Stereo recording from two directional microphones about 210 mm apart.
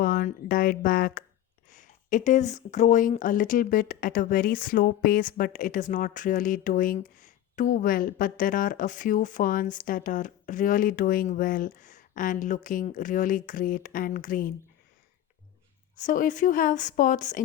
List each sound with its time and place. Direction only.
0.0 s speech: 40° left (ahead or behind)
16.0 s speech: 40° left (ahead or behind)